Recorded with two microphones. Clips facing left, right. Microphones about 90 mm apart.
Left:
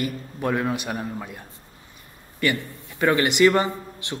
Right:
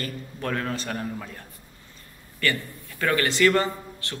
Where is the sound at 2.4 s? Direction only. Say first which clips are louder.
Left 3 dB; 20° left (ahead or behind).